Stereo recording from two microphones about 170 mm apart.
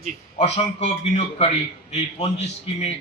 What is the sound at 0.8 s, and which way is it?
A man's voice, 40° left (ahead or behind).